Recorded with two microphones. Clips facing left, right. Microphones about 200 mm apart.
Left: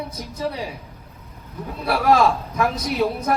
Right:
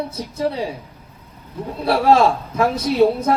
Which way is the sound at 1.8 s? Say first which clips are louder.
Right 3 dB; 30° right (ahead or behind).